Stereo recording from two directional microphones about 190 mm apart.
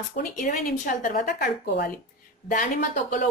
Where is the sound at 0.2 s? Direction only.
45° left (ahead or behind).